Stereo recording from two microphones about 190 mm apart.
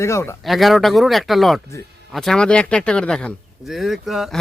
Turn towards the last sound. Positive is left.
turn(degrees=0)  # may be behind; listen again after turning